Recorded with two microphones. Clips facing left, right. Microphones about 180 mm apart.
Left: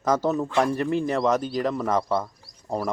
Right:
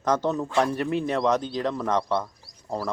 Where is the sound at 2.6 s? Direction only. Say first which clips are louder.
Left 2 dB; 15° left (ahead or behind).